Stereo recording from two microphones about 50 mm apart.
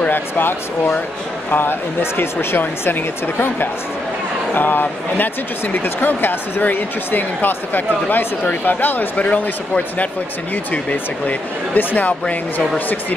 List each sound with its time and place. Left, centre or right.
0.1 s speech: left
9.1 s speech: left